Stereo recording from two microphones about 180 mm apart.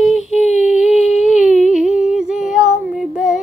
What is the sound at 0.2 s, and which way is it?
Female singing, 40° left (ahead or behind).